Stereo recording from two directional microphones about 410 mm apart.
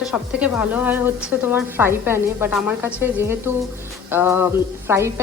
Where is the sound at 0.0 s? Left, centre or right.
Centre.